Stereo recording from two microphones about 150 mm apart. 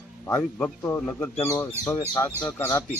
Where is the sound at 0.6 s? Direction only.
15° left (ahead or behind).